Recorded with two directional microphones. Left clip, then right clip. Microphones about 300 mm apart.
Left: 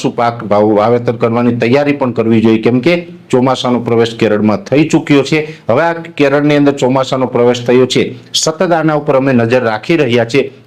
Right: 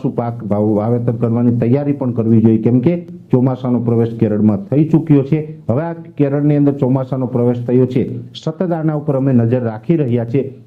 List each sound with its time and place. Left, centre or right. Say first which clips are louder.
0.0 s a man's voice: left 8 dB; centre
0.5 s a man's voice: left 6 dB; centre
0.8 s a man's voice: left 8 dB; centre